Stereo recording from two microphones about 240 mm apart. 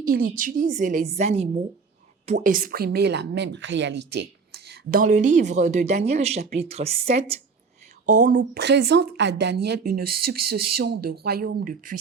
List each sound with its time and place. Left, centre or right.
0.0 s a woman's voice: right
8.4 s a woman's voice: right